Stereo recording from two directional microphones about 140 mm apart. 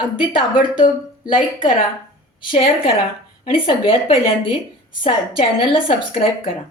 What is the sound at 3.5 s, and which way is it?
A woman's voice, 40° left (ahead or behind).